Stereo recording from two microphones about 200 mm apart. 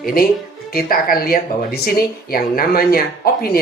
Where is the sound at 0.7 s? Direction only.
45° left (ahead or behind).